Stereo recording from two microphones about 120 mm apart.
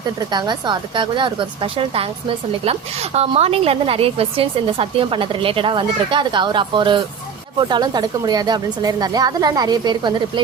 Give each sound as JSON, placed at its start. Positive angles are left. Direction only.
{"t": 0.0, "sound": "a woman's voice", "side_deg": -35}